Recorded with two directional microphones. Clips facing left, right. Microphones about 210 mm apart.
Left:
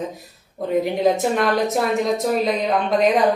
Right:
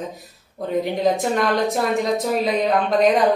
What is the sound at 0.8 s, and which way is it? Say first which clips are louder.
A woman's voice: even; centre (ahead or behind).